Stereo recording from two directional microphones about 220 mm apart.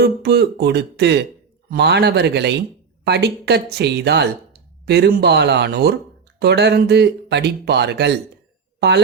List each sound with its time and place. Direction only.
0.0 s speech: 50° right (ahead or behind)